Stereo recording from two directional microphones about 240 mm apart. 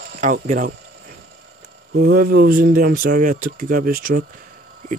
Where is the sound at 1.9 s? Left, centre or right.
Right.